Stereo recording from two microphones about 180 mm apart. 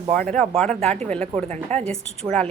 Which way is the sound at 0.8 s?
40° right (ahead or behind).